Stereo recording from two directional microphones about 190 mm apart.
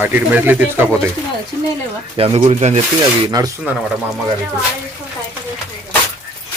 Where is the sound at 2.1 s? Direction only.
30° right (ahead or behind).